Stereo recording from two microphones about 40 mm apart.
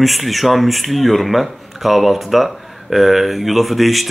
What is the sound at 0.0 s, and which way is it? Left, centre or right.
Speech, centre.